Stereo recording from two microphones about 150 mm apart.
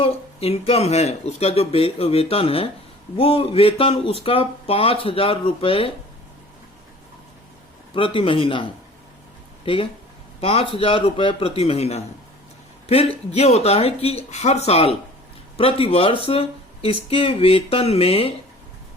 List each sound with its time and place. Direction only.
0.0 s speech: 40° left (ahead or behind)
7.9 s speech: 35° left (ahead or behind)
9.6 s speech: 40° left (ahead or behind)